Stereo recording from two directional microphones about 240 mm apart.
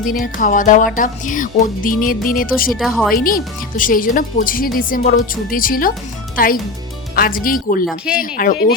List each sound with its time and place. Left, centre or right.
0.3 s speech: left
2.7 s speech: centre
3.2 s speech: left
7.9 s speech: centre
8.2 s speech: left